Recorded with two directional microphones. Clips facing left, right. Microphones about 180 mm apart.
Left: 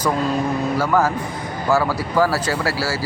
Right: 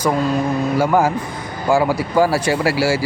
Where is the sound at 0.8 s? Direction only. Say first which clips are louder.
Right 3 dB; 15° right (ahead or behind).